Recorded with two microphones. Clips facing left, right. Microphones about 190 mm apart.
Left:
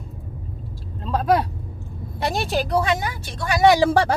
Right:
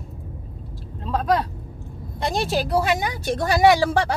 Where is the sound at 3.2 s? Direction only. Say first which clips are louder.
Right 9 dB; 50° right (ahead or behind).